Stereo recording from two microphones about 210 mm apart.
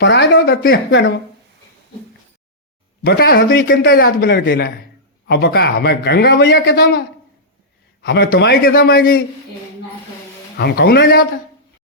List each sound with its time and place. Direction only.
0.0 s speech: 55° left (ahead or behind)
3.0 s a man's voice: 50° left (ahead or behind)
8.0 s a man's voice: 50° left (ahead or behind)
10.6 s a man's voice: 50° left (ahead or behind)